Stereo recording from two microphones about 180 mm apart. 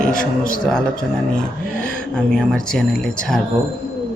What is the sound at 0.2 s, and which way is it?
Speech, 50° left (ahead or behind).